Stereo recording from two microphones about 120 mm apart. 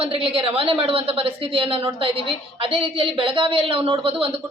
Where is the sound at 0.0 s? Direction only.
50° right (ahead or behind).